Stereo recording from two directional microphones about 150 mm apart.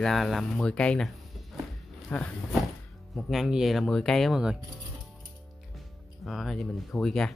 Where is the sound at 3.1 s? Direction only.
Centre (ahead or behind).